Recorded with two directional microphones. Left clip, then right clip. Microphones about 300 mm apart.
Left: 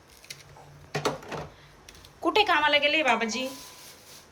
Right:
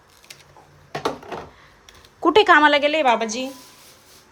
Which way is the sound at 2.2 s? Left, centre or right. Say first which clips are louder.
Right 9 dB; right.